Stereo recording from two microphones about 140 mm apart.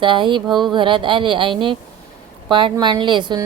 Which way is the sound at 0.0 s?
35° right (ahead or behind).